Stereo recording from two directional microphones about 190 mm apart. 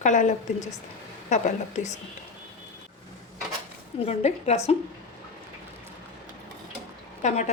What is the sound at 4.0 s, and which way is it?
Speech, 35° left (ahead or behind).